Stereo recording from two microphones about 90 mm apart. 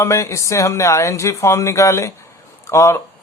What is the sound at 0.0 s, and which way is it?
Speech, 30° left (ahead or behind).